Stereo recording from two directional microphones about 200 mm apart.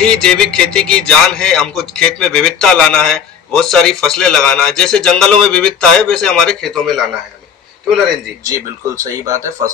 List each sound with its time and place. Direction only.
0.0 s a man's voice: 5° left (ahead or behind)
8.5 s speech: 15° right (ahead or behind)